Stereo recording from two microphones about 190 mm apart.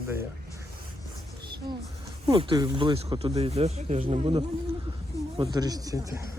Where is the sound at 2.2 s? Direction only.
25° right (ahead or behind).